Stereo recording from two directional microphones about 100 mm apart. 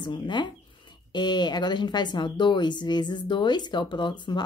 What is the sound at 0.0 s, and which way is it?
Speech, 50° left (ahead or behind).